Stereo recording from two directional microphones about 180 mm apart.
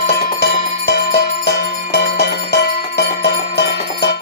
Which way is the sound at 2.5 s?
70° left (ahead or behind).